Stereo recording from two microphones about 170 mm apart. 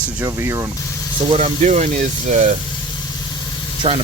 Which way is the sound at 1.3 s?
40° right (ahead or behind).